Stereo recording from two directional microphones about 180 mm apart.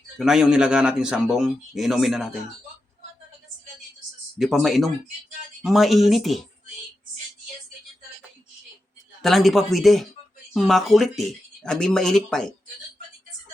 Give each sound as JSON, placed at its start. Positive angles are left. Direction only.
{"t": 0.2, "sound": "speech", "side_deg": -5}
{"t": 4.4, "sound": "speech", "side_deg": 0}
{"t": 9.2, "sound": "speech", "side_deg": 0}